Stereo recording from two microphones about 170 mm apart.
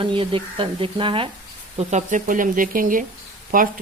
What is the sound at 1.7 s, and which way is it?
Speech, 45° right (ahead or behind).